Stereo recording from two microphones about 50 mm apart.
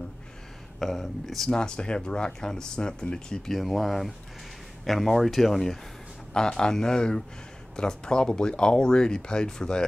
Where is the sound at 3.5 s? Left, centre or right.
Centre.